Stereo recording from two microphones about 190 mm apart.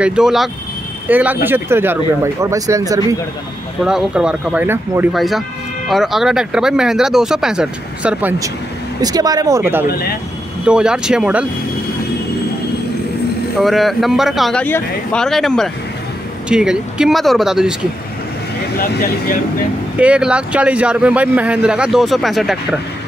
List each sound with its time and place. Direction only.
0.0 s speech: 5° right (ahead or behind)
3.8 s speech: 5° right (ahead or behind)
9.0 s speech: 20° right (ahead or behind)
9.8 s speech: 55° left (ahead or behind)
10.6 s speech: 5° right (ahead or behind)
13.6 s speech: centre (ahead or behind)
18.8 s speech: 55° left (ahead or behind)
20.0 s speech: 5° right (ahead or behind)